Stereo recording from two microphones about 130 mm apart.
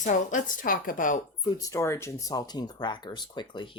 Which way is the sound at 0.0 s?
80° left.